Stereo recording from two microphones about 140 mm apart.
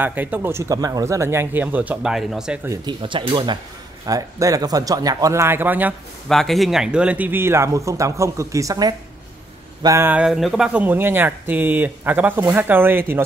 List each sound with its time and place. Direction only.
0.0 s speech: 15° right (ahead or behind)
2.8 s speech: 35° right (ahead or behind)
4.0 s speech: 25° right (ahead or behind)
6.2 s speech: centre (ahead or behind); by 10.1 s 20° right (ahead or behind)
10.1 s speech: 5° right (ahead or behind)